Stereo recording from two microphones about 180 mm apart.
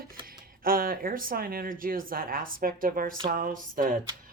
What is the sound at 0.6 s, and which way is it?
Speech, 55° right (ahead or behind).